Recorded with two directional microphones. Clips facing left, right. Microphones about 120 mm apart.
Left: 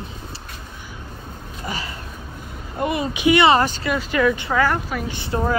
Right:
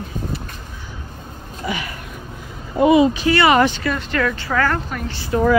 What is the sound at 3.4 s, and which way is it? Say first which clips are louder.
Speech: right 2 dB; 35° left (ahead or behind).